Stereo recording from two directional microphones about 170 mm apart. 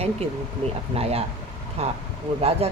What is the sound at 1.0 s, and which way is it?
Speech, 35° right (ahead or behind).